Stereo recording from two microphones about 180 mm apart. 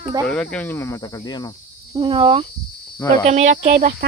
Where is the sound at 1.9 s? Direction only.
30° right (ahead or behind).